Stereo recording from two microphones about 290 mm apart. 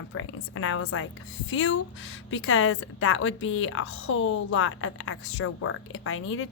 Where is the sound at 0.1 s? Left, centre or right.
Left.